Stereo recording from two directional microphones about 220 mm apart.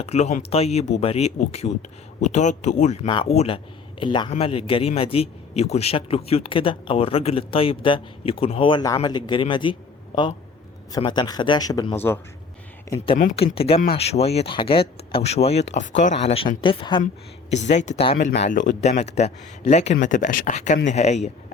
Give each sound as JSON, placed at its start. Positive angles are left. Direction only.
{"t": 0.0, "sound": "speech", "side_deg": 30}
{"t": 10.9, "sound": "speech", "side_deg": 20}
{"t": 13.1, "sound": "speech", "side_deg": 30}